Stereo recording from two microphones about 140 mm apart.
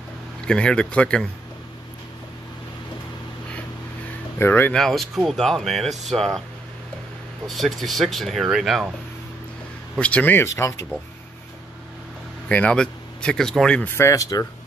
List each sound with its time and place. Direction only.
0.5 s speech: 5° left (ahead or behind)
4.4 s speech: 15° left (ahead or behind)
4.7 s speech: centre (ahead or behind)
7.4 s speech: centre (ahead or behind)
9.9 s speech: 10° left (ahead or behind)
12.4 s speech: 10° left (ahead or behind)
13.9 s speech: 20° left (ahead or behind)